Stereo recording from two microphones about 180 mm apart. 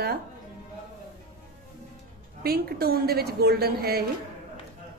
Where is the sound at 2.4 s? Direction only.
60° right (ahead or behind).